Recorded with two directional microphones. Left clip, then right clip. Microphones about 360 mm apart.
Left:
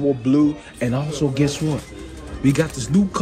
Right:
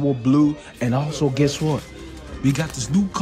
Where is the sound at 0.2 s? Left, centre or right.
Centre.